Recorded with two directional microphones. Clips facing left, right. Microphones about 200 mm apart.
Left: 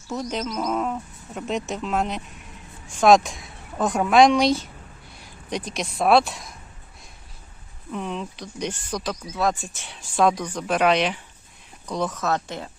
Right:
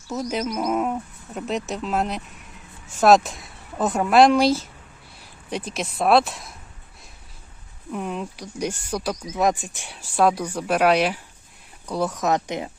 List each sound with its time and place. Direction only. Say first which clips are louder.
0.1 s speech: right 2 dB; 5° right (ahead or behind)
7.9 s speech: right 1 dB; 5° right (ahead or behind)